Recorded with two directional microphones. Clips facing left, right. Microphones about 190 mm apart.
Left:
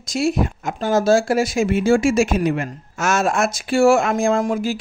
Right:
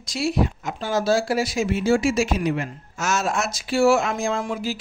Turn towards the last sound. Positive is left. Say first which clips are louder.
# left 6 dB
turn(degrees=50)  # may be behind; listen again after turning